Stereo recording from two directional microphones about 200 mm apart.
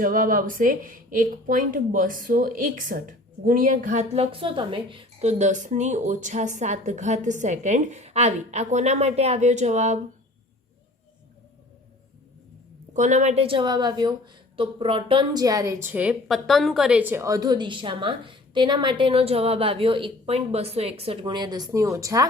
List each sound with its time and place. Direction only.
0.0 s speech: 45° right (ahead or behind)
12.9 s a woman's voice: 40° right (ahead or behind); by 22.3 s 15° right (ahead or behind)